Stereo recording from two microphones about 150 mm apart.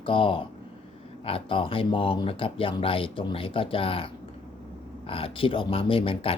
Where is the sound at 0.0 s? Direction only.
35° left (ahead or behind).